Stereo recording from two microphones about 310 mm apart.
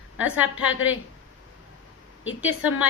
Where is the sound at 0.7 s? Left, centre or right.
Left.